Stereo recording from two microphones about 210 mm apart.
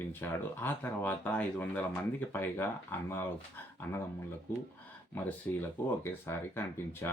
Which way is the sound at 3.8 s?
10° left (ahead or behind).